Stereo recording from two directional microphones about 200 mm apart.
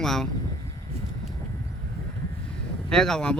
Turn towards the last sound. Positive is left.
turn(degrees=5)  # may be behind; listen again after turning